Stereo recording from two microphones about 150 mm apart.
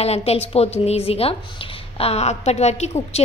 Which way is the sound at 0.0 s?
45° left (ahead or behind).